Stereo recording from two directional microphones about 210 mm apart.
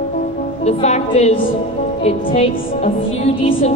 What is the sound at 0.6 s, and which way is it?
Speech, 30° left (ahead or behind).